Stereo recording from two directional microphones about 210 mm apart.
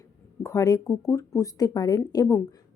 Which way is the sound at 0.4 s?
15° left (ahead or behind).